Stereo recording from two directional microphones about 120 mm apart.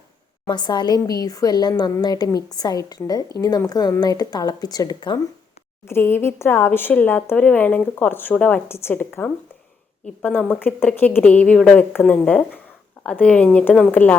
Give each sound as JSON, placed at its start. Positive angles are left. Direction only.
{"t": 0.4, "sound": "a woman's voice", "side_deg": 35}
{"t": 5.9, "sound": "speech", "side_deg": 20}
{"t": 10.2, "sound": "speech", "side_deg": 15}